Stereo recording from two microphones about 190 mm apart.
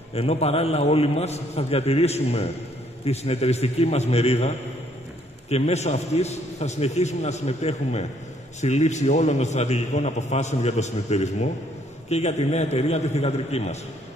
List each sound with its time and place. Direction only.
0.1 s a man's voice: 35° left (ahead or behind)